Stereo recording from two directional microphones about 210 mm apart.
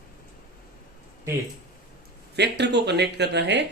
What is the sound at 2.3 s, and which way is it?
Speech, 55° right (ahead or behind).